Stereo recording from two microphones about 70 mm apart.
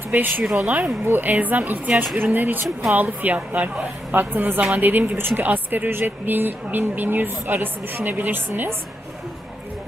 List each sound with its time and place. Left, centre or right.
0.1 s speech: right